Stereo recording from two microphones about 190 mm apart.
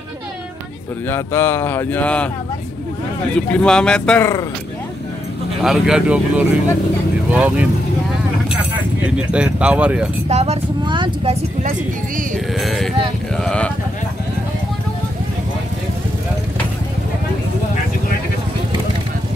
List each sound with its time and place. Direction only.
1.0 s speech: 10° left (ahead or behind)
3.3 s speech: 5° left (ahead or behind)
5.6 s speech: centre (ahead or behind)
9.0 s speech: 5° right (ahead or behind)
10.2 s a woman's voice: 35° right (ahead or behind)
12.5 s a sound: centre (ahead or behind)
13.4 s speech: 5° left (ahead or behind)